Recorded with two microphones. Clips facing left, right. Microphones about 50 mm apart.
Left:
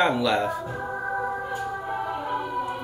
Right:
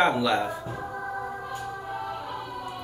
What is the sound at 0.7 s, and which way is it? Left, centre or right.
Music, left.